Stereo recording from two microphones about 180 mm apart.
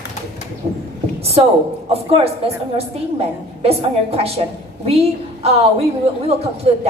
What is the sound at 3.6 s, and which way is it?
A woman's voice, 35° right (ahead or behind).